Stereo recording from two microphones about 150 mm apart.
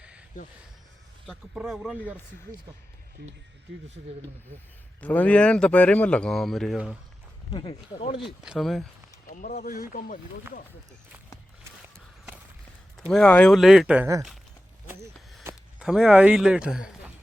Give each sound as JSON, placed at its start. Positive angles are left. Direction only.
{"t": 0.0, "sound": "a sound", "side_deg": -5}
{"t": 1.3, "sound": "speech", "side_deg": 0}
{"t": 4.9, "sound": "speech", "side_deg": 10}
{"t": 7.5, "sound": "speech", "side_deg": 35}
{"t": 8.4, "sound": "speech", "side_deg": 0}
{"t": 9.2, "sound": "speech", "side_deg": 65}
{"t": 13.0, "sound": "speech", "side_deg": 5}
{"t": 15.8, "sound": "speech", "side_deg": 0}